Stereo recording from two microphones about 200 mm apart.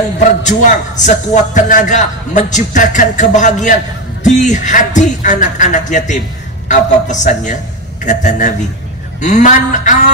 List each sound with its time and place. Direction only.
0.4 s a man's voice: 40° left (ahead or behind)